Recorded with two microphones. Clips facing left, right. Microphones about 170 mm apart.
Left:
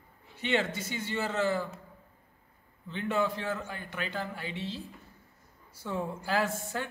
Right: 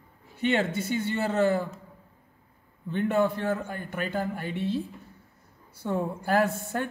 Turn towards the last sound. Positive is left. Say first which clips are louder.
# right 5 dB
turn(degrees=-60)  # may be behind; listen again after turning